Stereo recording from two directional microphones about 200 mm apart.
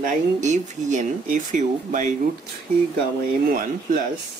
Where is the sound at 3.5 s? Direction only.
45° right (ahead or behind).